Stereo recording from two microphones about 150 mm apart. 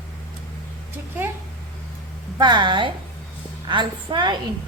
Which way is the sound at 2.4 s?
30° right (ahead or behind).